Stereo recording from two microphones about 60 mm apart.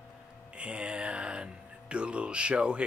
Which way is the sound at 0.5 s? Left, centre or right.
Centre.